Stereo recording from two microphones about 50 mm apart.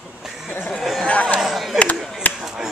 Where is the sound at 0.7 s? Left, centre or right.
Centre.